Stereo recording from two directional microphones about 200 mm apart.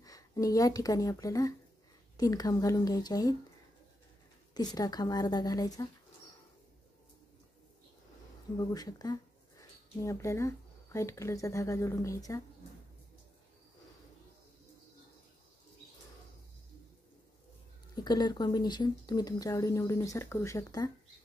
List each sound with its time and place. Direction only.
0.0 s speech: 20° left (ahead or behind)
4.6 s speech: 20° left (ahead or behind)
8.5 s speech: 20° left (ahead or behind)
17.9 s speech: 20° left (ahead or behind)